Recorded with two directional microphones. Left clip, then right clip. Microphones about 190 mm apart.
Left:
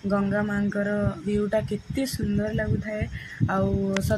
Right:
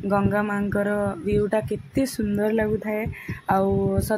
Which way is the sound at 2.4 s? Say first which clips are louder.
Right 6 dB; 25° right (ahead or behind).